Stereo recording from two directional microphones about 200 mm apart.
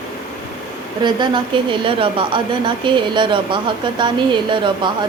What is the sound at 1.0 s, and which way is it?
A woman's voice, 20° right (ahead or behind).